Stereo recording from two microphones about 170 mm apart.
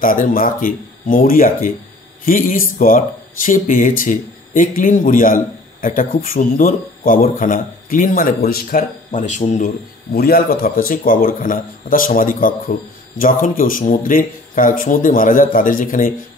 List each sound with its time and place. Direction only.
0.0 s speech: 55° left (ahead or behind)
10.1 s speech: 65° left (ahead or behind)